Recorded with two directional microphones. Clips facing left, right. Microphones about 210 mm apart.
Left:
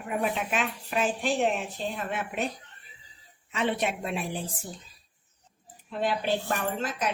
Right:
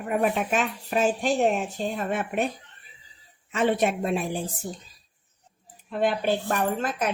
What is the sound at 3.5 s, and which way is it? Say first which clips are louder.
Speech: right 5 dB; 45° right (ahead or behind).